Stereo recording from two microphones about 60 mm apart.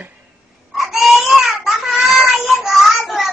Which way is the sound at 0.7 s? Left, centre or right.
Centre.